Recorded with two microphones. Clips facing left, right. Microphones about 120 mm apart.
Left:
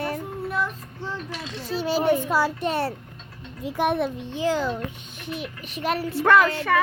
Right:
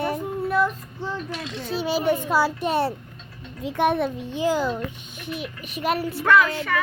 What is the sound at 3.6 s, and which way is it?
Speech, centre (ahead or behind).